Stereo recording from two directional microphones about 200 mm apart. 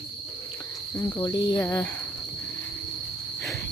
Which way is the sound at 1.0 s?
15° left (ahead or behind).